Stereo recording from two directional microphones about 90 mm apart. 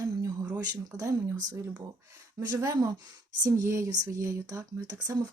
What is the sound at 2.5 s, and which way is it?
Speech, 35° right (ahead or behind).